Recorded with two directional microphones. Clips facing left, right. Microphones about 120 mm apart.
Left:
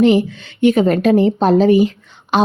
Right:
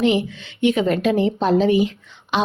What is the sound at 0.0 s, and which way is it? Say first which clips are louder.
A woman's voice: left 6 dB; 40° left (ahead or behind).